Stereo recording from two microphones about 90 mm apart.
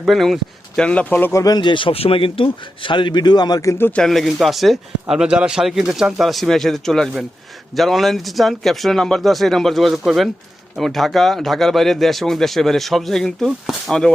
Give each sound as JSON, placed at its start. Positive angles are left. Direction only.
{"t": 0.0, "sound": "speech", "side_deg": 0}
{"t": 0.8, "sound": "speech", "side_deg": 15}
{"t": 1.3, "sound": "speech", "side_deg": 40}
{"t": 1.6, "sound": "speech", "side_deg": 70}
{"t": 3.6, "sound": "speech", "side_deg": 35}
{"t": 3.9, "sound": "speech", "side_deg": 5}